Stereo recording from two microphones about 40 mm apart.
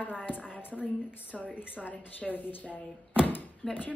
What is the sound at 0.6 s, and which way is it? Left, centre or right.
Speech, left.